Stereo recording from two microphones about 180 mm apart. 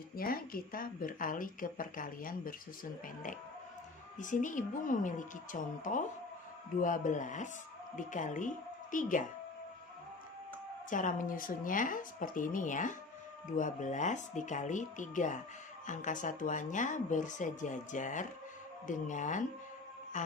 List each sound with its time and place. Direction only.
0.2 s speech: 55° left (ahead or behind)
4.2 s speech: 45° left (ahead or behind)
10.8 s speech: 45° left (ahead or behind)
20.1 s music: 45° left (ahead or behind)